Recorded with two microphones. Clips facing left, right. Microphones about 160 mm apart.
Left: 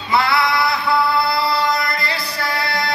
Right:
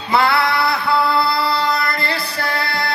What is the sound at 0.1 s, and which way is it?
Music, 55° right (ahead or behind).